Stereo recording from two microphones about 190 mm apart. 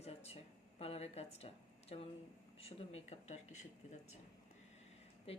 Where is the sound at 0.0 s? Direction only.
35° left (ahead or behind).